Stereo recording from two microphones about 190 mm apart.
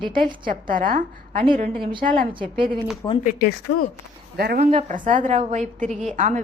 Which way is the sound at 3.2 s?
50° left (ahead or behind).